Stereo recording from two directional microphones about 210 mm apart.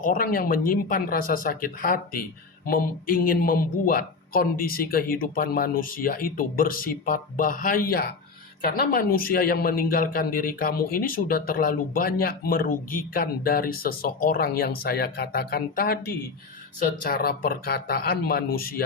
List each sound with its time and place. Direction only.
0.0 s speech: 40° left (ahead or behind)